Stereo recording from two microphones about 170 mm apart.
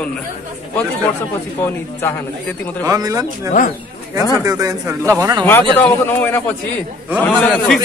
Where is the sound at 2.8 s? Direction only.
20° right (ahead or behind).